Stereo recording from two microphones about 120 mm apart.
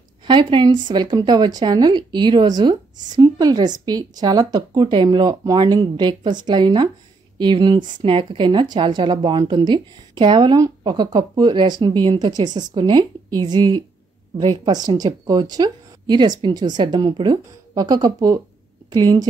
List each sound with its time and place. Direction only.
0.2 s speech: 40° right (ahead or behind)